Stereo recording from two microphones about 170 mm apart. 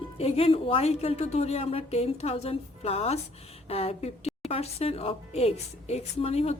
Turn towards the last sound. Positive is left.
turn(degrees=40)  # may be behind; listen again after turning